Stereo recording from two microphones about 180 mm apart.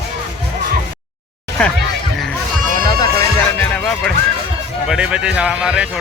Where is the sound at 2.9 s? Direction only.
20° left (ahead or behind).